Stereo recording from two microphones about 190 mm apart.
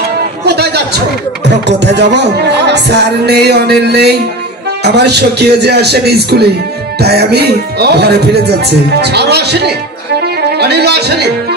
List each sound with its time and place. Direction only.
0.5 s speech: 60° right (ahead or behind)
10.2 s music: 60° right (ahead or behind)